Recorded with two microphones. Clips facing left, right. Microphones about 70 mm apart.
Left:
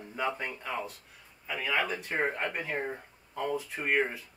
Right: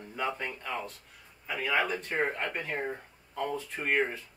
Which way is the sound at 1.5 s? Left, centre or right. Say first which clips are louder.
Right 1 dB; centre.